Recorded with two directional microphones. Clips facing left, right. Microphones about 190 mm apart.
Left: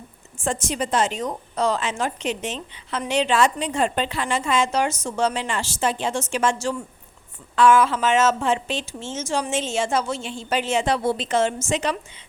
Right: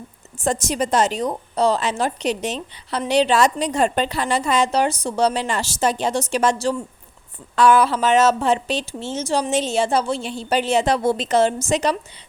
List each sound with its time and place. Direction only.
0.4 s a woman's voice: 40° right (ahead or behind)